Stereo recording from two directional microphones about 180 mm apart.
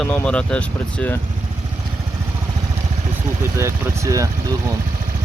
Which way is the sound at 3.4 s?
15° right (ahead or behind).